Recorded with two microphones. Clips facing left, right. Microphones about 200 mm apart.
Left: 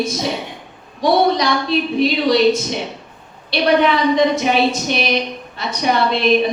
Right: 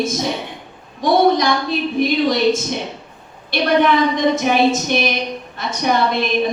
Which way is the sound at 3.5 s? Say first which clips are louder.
Even; 50° right (ahead or behind).